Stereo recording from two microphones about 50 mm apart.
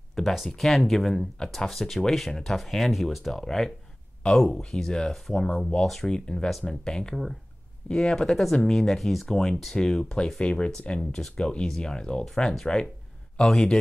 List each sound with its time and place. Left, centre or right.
0.1 s a sound: centre
0.5 s speech: centre
6.1 s speech: centre
10.4 s speech: left